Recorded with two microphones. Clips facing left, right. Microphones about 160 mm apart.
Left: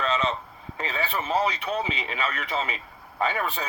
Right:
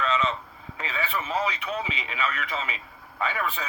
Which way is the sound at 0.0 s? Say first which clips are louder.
Even; 35° left (ahead or behind).